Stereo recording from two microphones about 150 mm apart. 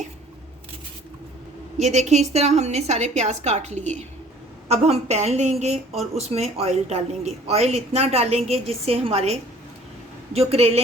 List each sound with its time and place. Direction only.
1.8 s a woman's voice: 50° right (ahead or behind)